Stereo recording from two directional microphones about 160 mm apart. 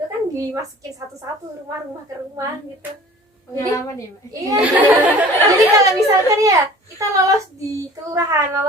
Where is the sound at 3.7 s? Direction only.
20° left (ahead or behind).